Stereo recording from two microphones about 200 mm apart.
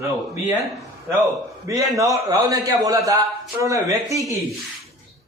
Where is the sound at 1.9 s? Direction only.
15° right (ahead or behind).